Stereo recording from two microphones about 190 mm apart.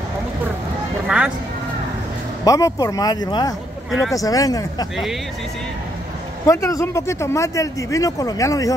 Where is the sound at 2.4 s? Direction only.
15° left (ahead or behind).